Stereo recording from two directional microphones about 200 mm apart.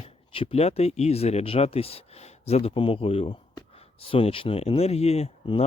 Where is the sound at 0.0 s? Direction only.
30° left (ahead or behind).